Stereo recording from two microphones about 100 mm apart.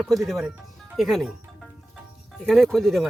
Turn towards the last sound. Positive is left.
turn(degrees=0)  # may be behind; listen again after turning